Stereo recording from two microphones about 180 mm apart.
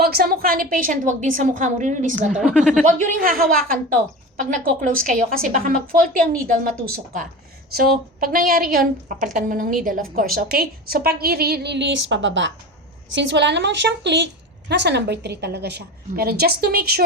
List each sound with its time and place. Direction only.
0.0 s a woman's voice: 55° right (ahead or behind)
2.4 s a woman's voice: centre (ahead or behind)
2.8 s a woman's voice: 45° right (ahead or behind); by 12.5 s 90° right
13.1 s a woman's voice: 75° right (ahead or behind); by 17.0 s 60° right (ahead or behind)